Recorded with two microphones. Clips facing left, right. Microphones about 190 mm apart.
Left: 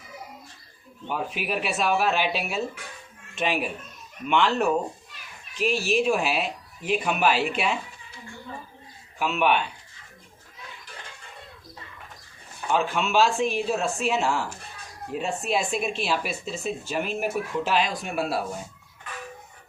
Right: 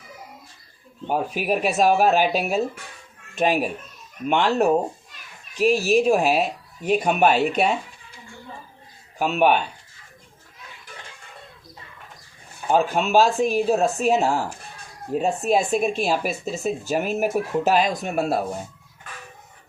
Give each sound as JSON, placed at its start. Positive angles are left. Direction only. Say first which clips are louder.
{"t": 1.0, "sound": "speech", "louder": "right 6 dB", "side_deg": -40}
{"t": 9.1, "sound": "speech", "louder": "right 4 dB", "side_deg": -40}
{"t": 12.6, "sound": "speech", "louder": "right 5 dB", "side_deg": -40}